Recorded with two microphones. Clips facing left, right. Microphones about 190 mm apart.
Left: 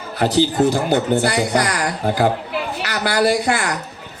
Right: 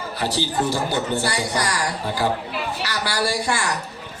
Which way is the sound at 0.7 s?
55° left (ahead or behind).